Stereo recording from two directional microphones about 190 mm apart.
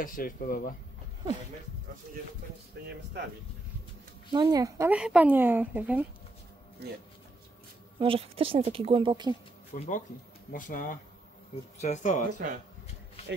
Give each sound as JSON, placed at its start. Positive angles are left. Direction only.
{"t": 0.0, "sound": "speech", "side_deg": 45}
{"t": 4.3, "sound": "speech", "side_deg": -20}
{"t": 8.0, "sound": "speech", "side_deg": -30}
{"t": 9.8, "sound": "speech", "side_deg": 40}